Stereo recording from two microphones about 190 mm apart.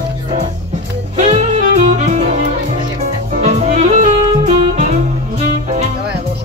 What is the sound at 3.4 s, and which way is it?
Saxophone, 35° right (ahead or behind).